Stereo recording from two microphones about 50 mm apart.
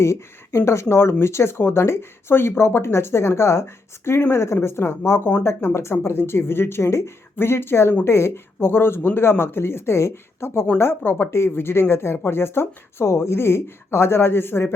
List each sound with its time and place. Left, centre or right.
0.0 s speech: left
4.2 s speech: left
6.8 s speech: left
7.3 s speech: left